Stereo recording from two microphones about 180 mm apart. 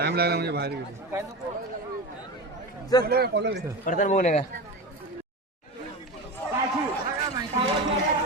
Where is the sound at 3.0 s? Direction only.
60° right (ahead or behind).